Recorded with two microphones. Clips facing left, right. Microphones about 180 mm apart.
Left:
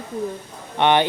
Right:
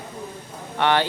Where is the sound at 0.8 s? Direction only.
20° left (ahead or behind).